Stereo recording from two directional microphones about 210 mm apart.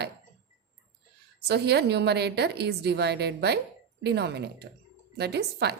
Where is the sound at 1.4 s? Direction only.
50° right (ahead or behind).